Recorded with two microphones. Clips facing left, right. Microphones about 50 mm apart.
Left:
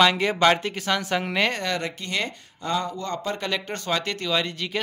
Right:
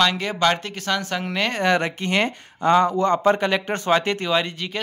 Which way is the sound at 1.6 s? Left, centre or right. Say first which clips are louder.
Right 8 dB; right.